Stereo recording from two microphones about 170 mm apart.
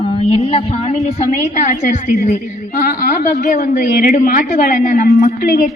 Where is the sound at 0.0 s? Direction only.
35° left (ahead or behind).